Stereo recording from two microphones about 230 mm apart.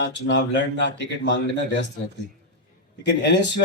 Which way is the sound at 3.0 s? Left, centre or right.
Left.